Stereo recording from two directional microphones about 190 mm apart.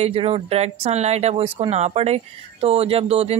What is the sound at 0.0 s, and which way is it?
Speech, 30° right (ahead or behind).